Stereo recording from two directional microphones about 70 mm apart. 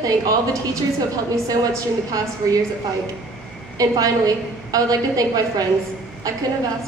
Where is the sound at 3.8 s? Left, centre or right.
Right.